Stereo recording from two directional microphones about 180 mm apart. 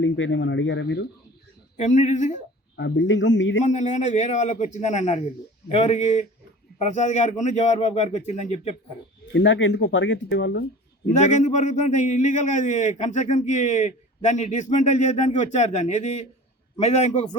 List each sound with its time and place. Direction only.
0.0 s speech: 90° left
1.7 s speech: 40° left (ahead or behind)
2.7 s speech: 80° left
3.6 s a man's voice: 40° left (ahead or behind)
9.3 s speech: 85° left
11.2 s a man's voice: 40° left (ahead or behind)